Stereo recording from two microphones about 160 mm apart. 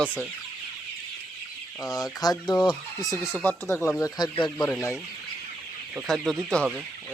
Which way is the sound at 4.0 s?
25° left (ahead or behind).